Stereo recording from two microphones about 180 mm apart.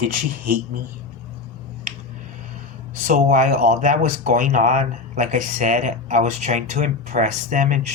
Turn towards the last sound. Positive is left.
turn(degrees=-40)  # may be behind; listen again after turning